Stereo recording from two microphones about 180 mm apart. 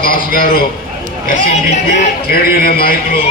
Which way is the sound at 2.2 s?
55° left (ahead or behind).